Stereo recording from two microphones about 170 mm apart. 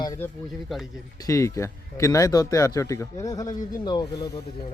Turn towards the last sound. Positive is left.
turn(degrees=20)  # may be behind; listen again after turning